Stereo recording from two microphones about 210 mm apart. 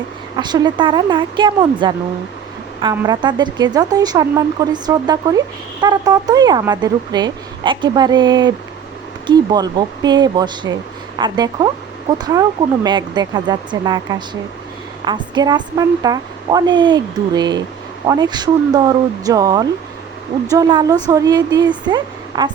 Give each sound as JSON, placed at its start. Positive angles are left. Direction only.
{"t": 0.3, "sound": "a woman's voice", "side_deg": -20}